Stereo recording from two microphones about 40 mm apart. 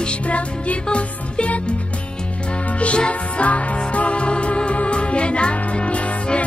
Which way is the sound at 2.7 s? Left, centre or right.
Left.